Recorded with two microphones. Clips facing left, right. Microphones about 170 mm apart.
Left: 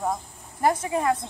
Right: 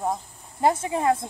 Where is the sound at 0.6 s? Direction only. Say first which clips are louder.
Right 1 dB; 25° right (ahead or behind).